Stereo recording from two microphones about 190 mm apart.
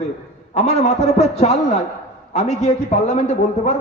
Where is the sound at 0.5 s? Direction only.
35° left (ahead or behind).